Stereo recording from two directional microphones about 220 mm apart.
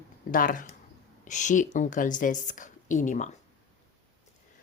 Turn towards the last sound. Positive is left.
turn(degrees=35)  # may be behind; listen again after turning